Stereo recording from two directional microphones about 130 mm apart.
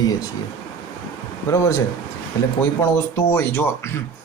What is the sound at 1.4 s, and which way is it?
Speech, 20° left (ahead or behind).